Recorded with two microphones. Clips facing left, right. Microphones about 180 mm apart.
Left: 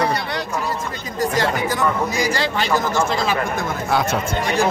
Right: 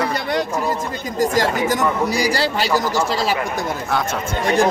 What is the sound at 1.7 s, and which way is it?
Speech, 35° right (ahead or behind).